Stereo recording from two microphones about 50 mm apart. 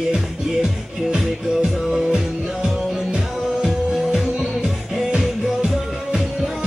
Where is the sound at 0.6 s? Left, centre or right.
Centre.